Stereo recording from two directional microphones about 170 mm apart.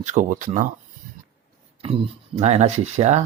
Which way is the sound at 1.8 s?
30° right (ahead or behind).